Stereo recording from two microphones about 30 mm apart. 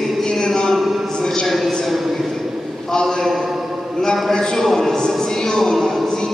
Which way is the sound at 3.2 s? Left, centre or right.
Centre.